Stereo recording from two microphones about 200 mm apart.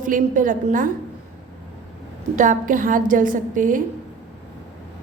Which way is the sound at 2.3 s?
40° right (ahead or behind).